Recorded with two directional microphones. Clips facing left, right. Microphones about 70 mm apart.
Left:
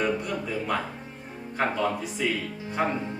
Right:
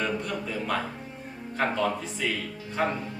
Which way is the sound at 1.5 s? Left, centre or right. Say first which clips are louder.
Even; centre.